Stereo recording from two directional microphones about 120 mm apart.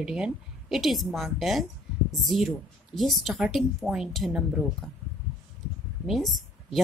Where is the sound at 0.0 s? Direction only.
5° right (ahead or behind).